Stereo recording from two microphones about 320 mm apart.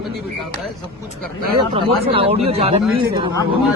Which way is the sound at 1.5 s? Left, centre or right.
Centre.